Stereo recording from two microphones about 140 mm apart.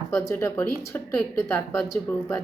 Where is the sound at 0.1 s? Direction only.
20° left (ahead or behind).